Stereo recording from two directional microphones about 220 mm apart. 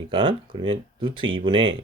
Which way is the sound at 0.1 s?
20° right (ahead or behind).